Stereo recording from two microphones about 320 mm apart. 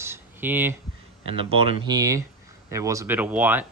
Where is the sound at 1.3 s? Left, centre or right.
Centre.